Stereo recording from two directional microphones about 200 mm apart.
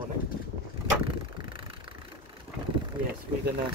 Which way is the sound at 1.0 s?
25° right (ahead or behind).